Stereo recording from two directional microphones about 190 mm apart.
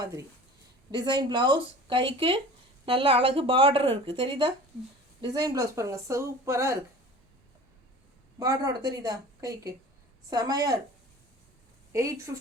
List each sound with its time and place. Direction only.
0.0 s a woman's voice: 15° right (ahead or behind)
8.4 s a woman's voice: 20° right (ahead or behind)
11.9 s a woman's voice: 15° right (ahead or behind)